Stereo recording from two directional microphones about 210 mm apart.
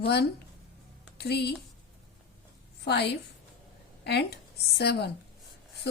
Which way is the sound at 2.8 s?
50° left (ahead or behind).